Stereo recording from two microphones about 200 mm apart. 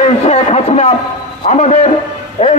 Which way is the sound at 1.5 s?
35° left (ahead or behind).